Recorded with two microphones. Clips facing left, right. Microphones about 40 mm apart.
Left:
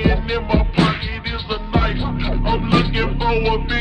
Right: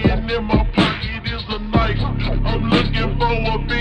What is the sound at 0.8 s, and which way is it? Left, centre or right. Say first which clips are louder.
Music: left 1 dB; right.